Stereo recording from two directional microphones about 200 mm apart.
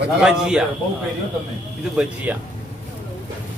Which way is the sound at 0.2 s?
5° right (ahead or behind).